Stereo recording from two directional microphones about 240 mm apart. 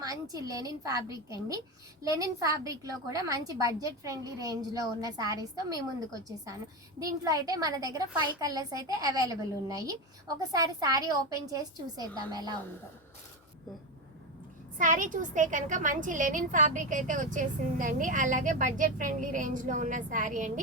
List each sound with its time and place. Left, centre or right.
0.0 s a woman's voice: centre
7.0 s a woman's voice: centre
14.8 s a woman's voice: right